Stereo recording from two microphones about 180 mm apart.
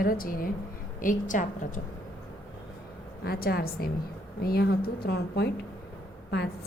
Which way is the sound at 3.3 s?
60° left (ahead or behind).